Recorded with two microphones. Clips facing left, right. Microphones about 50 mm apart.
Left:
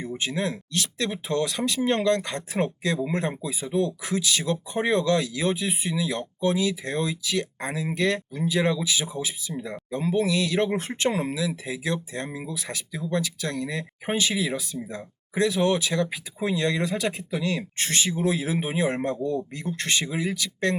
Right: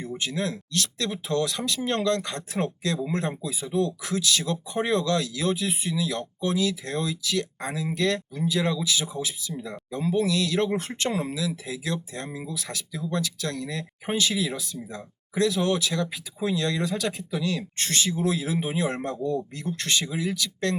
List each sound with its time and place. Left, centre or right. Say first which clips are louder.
0.2 s speech: left 1 dB; left